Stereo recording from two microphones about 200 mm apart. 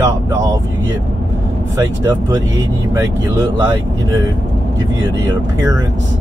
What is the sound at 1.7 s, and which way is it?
Speech, 15° right (ahead or behind).